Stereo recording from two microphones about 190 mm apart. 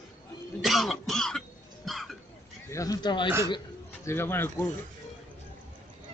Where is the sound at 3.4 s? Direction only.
20° left (ahead or behind).